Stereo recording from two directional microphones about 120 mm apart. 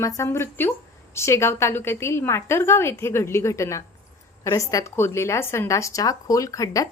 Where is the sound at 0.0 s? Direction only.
25° left (ahead or behind).